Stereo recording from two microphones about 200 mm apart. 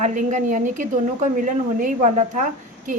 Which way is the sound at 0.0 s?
40° right (ahead or behind).